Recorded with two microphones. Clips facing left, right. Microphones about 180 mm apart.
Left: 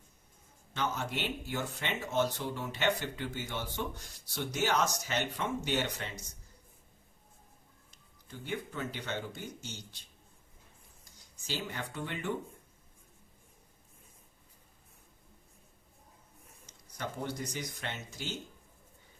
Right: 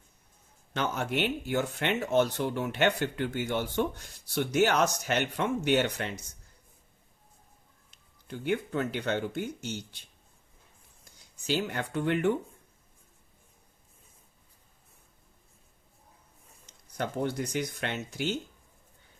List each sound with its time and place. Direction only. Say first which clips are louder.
0.7 s speech: right 4 dB; 65° right (ahead or behind)
8.3 s speech: right 9 dB; 65° right (ahead or behind)
11.0 s speech: right 12 dB; 60° right (ahead or behind)
17.0 s speech: right 7 dB; 60° right (ahead or behind)